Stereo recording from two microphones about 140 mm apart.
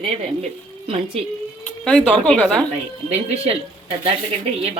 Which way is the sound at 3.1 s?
45° right (ahead or behind).